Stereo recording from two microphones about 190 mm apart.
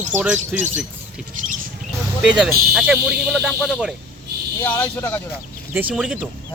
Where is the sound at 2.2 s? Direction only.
5° right (ahead or behind).